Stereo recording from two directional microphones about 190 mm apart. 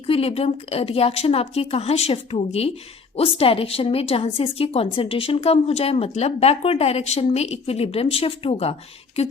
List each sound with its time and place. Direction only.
0.1 s a woman's voice: 30° left (ahead or behind)